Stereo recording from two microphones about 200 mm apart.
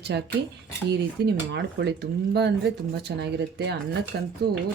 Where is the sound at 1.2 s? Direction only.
60° right (ahead or behind).